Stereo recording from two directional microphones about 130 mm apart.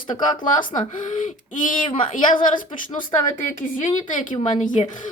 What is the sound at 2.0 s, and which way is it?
Speech, 90° left.